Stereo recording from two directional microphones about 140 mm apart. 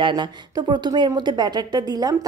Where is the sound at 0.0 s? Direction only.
30° right (ahead or behind).